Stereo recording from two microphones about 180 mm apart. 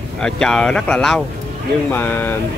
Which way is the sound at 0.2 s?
5° left (ahead or behind).